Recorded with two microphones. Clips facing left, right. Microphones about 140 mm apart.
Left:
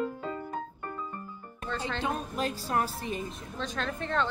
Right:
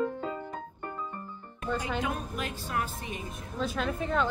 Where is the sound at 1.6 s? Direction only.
10° right (ahead or behind).